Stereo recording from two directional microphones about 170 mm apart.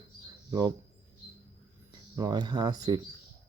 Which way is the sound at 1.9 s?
20° right (ahead or behind).